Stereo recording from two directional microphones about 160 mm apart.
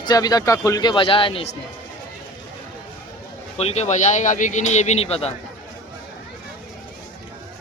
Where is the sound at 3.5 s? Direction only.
40° left (ahead or behind).